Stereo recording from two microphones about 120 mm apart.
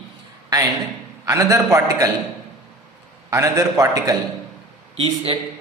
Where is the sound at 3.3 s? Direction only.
25° right (ahead or behind).